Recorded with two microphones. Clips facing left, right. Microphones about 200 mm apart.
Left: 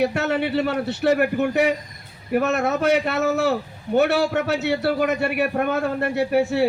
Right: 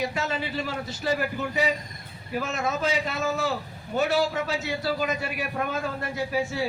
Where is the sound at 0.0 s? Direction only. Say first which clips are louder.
Left 8 dB; 65° left (ahead or behind).